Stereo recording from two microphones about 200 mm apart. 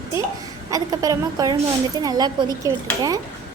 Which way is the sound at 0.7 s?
15° right (ahead or behind).